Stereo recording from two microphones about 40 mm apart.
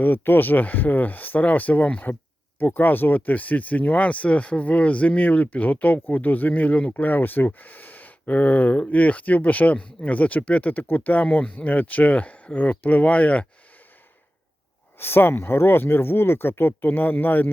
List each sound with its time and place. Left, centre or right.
0.0 s speech: left
14.9 s speech: left
16.8 s speech: left